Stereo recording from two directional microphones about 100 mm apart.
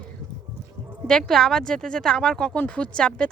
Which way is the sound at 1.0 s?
5° left (ahead or behind).